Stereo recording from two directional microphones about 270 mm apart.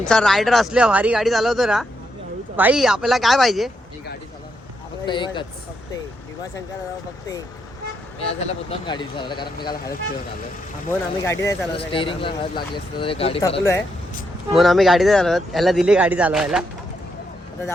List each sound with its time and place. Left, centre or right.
0.1 s speech: centre
5.0 s speech: centre
8.2 s speech: left
10.8 s speech: centre
14.5 s speech: centre